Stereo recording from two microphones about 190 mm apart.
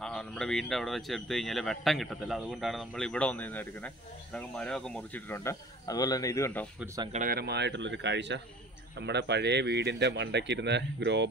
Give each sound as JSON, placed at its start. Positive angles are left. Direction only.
{"t": 0.0, "sound": "speech", "side_deg": 5}
{"t": 7.1, "sound": "speech", "side_deg": -45}